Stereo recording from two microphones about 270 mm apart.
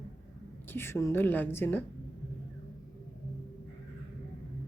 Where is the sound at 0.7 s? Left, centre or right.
Centre.